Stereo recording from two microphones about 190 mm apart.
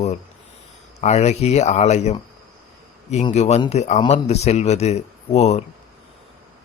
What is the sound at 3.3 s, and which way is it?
Speech, 35° left (ahead or behind).